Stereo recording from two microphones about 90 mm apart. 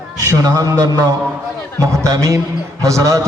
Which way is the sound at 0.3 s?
40° right (ahead or behind).